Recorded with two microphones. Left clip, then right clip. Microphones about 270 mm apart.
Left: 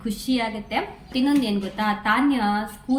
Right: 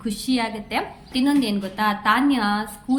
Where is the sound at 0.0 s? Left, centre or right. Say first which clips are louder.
Right 1 dB; centre.